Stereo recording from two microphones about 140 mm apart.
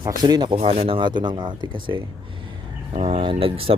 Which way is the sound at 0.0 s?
30° right (ahead or behind).